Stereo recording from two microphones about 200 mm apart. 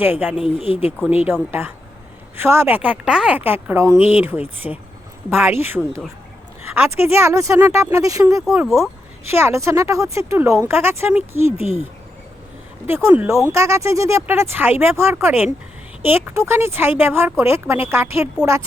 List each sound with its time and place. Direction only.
0.0 s speech: 10° right (ahead or behind)
0.4 s speech: 30° left (ahead or behind)
1.3 s speech: 10° right (ahead or behind)
8.4 s speech: centre (ahead or behind)
9.2 s speech: 10° right (ahead or behind)
12.9 s speech: 10° right (ahead or behind)